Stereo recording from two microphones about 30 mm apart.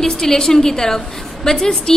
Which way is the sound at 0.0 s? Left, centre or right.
Centre.